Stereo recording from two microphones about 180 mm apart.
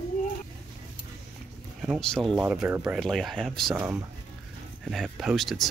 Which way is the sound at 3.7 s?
10° right (ahead or behind).